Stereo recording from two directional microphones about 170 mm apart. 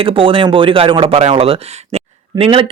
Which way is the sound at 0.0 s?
30° right (ahead or behind).